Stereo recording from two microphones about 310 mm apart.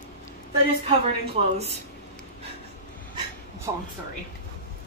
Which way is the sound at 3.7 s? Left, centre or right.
Centre.